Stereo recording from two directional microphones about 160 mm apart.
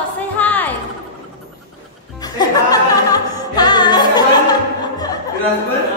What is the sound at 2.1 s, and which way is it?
Music, 25° left (ahead or behind).